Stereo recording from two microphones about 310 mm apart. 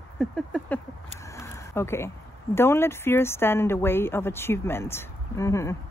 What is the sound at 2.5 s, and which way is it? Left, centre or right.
Speech, centre.